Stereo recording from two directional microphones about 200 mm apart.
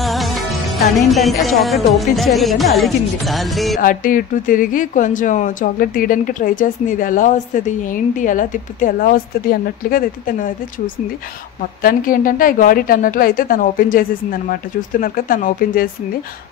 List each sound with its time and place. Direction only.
0.0 s music: centre (ahead or behind)
0.9 s speech: centre (ahead or behind)
3.8 s speech: 45° left (ahead or behind)
11.8 s a woman's voice: 45° left (ahead or behind)